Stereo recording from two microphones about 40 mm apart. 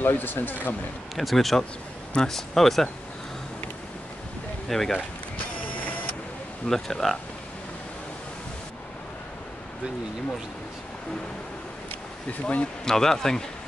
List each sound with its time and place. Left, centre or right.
0.0 s speech: left
1.1 s speech: centre
4.6 s speech: centre
6.7 s speech: centre
12.3 s speech: left
12.8 s speech: centre